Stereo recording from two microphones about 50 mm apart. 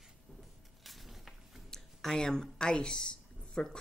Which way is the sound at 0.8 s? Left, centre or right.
Centre.